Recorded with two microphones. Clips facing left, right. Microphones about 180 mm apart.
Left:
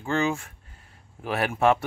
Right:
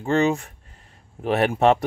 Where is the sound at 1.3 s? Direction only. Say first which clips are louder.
Right 4 dB; 30° right (ahead or behind).